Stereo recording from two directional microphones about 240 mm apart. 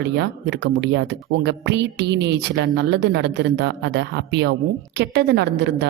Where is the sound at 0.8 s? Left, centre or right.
Right.